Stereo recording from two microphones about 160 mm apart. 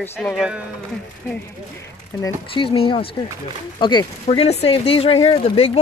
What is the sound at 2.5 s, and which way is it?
Speech, 35° left (ahead or behind).